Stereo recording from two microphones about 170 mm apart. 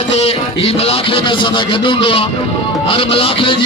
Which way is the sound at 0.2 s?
35° left (ahead or behind).